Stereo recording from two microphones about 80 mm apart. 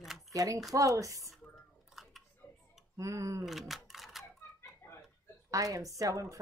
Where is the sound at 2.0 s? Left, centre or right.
Centre.